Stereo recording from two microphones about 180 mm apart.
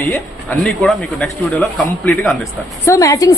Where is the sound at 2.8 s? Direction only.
15° left (ahead or behind).